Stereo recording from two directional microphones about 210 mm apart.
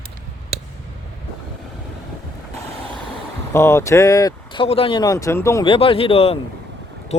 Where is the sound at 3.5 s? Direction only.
10° left (ahead or behind).